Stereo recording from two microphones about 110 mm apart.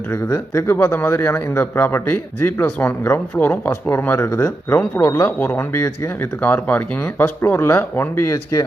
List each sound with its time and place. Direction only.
0.1 s a man's voice: 30° left (ahead or behind)
6.4 s a man's voice: 15° left (ahead or behind)